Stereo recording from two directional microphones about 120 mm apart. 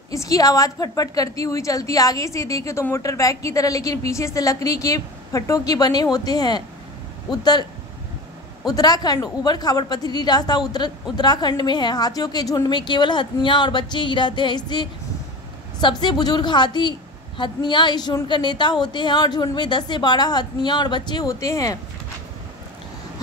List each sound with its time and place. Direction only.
0.1 s a woman's voice: 30° left (ahead or behind)
8.6 s a woman's voice: 35° left (ahead or behind)